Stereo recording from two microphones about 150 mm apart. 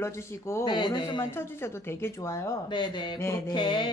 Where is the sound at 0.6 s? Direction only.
30° left (ahead or behind).